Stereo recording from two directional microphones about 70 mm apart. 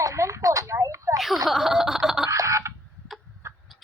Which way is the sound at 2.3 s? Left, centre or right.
Right.